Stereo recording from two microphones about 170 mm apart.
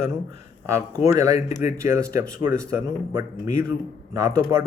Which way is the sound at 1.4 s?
45° left (ahead or behind).